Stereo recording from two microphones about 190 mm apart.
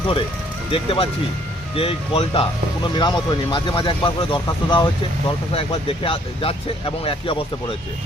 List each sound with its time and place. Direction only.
0.7 s speech: 30° left (ahead or behind)